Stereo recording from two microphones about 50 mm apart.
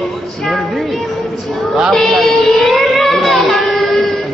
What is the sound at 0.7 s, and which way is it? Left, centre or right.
Music, centre.